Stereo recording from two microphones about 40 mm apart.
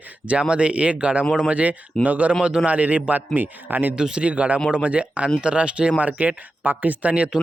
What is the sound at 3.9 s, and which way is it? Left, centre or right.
Speech, right.